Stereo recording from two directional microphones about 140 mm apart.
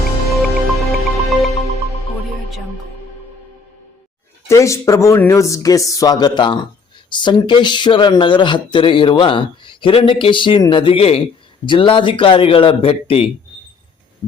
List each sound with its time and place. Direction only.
0.3 s music: centre (ahead or behind)
4.4 s speech: 20° left (ahead or behind); by 13.2 s 40° left (ahead or behind)